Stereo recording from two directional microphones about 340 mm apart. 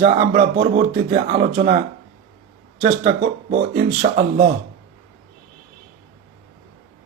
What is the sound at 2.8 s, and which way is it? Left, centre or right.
Speech, right.